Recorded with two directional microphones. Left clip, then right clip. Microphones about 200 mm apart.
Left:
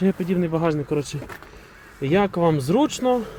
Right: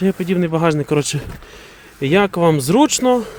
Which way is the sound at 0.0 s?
20° right (ahead or behind).